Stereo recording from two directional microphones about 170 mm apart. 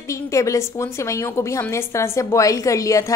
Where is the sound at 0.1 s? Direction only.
20° left (ahead or behind).